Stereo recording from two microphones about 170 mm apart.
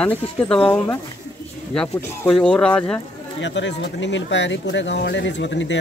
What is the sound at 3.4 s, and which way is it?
Speech, 90° left.